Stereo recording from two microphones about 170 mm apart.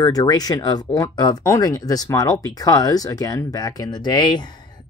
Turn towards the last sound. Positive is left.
turn(degrees=25)  # may be behind; listen again after turning